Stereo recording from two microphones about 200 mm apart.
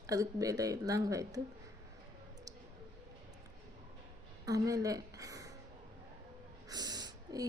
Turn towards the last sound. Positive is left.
turn(degrees=-20)  # may be behind; listen again after turning